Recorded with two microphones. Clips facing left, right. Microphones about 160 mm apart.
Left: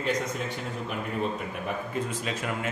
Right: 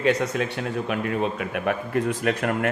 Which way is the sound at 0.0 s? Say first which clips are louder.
Right 7 dB; 70° right (ahead or behind).